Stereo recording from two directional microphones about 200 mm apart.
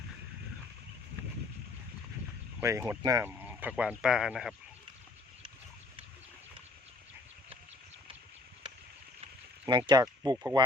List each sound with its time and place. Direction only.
2.6 s speech: 10° right (ahead or behind)
9.2 s a sound: 20° right (ahead or behind)
10.3 s speech: 10° right (ahead or behind)